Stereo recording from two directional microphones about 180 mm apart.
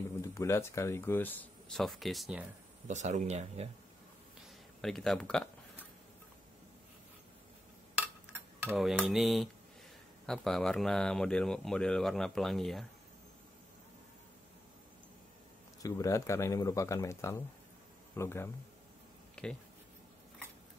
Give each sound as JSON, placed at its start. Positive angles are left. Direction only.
{"t": 0.2, "sound": "speech", "side_deg": 15}
{"t": 2.9, "sound": "speech", "side_deg": -40}
{"t": 4.8, "sound": "speech", "side_deg": 0}
{"t": 8.3, "sound": "cutlery", "side_deg": -5}
{"t": 8.6, "sound": "speech", "side_deg": 0}
{"t": 15.8, "sound": "speech", "side_deg": 15}
{"t": 19.4, "sound": "a sound", "side_deg": 5}